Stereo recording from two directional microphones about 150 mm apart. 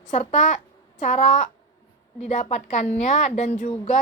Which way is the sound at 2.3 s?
55° left (ahead or behind).